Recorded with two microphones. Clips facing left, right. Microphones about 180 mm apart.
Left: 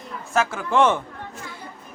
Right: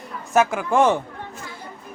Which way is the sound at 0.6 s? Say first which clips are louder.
Right 1 dB; 40° right (ahead or behind).